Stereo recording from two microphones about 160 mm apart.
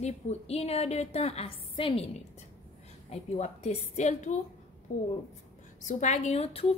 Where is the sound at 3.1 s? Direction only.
45° left (ahead or behind).